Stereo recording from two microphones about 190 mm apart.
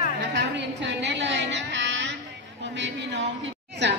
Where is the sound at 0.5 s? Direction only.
70° right (ahead or behind).